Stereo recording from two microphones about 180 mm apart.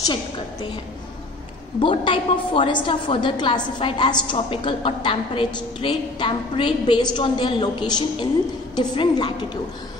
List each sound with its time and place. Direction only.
1.8 s a woman's voice: 30° left (ahead or behind)